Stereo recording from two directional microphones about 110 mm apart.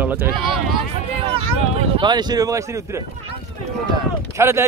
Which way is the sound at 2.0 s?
40° right (ahead or behind).